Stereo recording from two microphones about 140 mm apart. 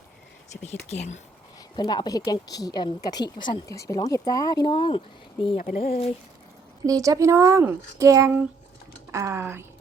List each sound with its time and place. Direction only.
0.5 s speech: 55° left (ahead or behind)
1.7 s a woman's voice: 30° left (ahead or behind); by 6.1 s 45° left (ahead or behind)
6.8 s speech: 25° right (ahead or behind)